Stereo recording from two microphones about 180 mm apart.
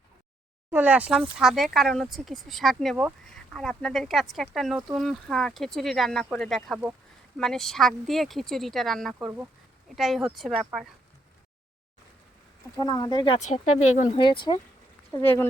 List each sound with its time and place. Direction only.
0.7 s speech: 10° right (ahead or behind)
9.1 s speech: 10° right (ahead or behind)
12.8 s speech: 20° left (ahead or behind)
13.4 s speech: 40° left (ahead or behind)
14.2 s speech: 25° left (ahead or behind)
15.1 s speech: 10° left (ahead or behind)